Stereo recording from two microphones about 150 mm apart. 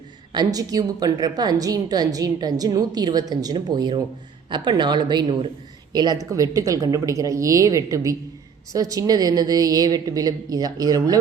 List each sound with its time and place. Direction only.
0.3 s a woman's voice: 25° right (ahead or behind)